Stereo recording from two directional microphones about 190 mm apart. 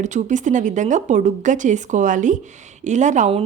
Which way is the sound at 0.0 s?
40° right (ahead or behind).